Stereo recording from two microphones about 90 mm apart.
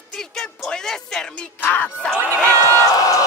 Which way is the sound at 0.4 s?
5° left (ahead or behind).